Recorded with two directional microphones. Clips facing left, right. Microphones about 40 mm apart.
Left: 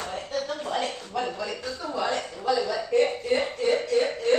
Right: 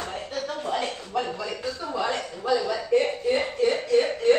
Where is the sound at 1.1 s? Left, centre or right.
Centre.